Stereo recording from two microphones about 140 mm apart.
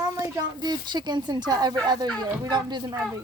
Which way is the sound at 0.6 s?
30° right (ahead or behind).